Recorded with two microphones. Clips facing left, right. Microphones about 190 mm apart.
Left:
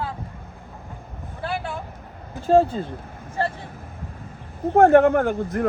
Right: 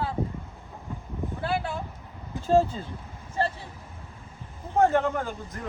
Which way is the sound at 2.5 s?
60° left (ahead or behind).